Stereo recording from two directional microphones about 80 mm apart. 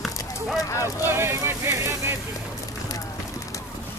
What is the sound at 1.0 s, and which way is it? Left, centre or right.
Speech, right.